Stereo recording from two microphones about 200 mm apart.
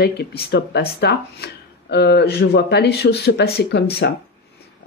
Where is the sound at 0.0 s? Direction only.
50° left (ahead or behind).